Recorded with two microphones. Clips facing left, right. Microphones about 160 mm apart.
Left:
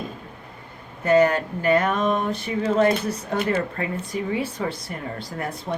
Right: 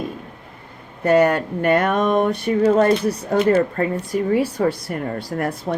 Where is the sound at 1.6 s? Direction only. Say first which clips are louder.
Right 3 dB; 60° right (ahead or behind); by 4.4 s 40° right (ahead or behind).